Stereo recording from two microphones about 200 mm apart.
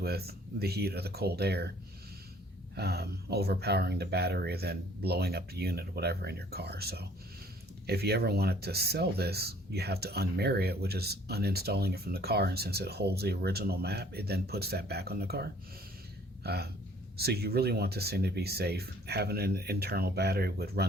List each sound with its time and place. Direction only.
0.0 s speech: 50° right (ahead or behind)
2.7 s speech: 55° right (ahead or behind)